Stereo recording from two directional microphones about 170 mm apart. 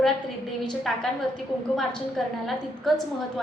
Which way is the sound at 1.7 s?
Centre (ahead or behind).